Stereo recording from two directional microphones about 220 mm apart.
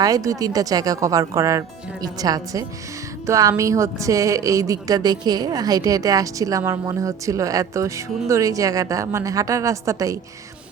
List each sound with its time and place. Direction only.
0.0 s a woman's voice: 15° right (ahead or behind)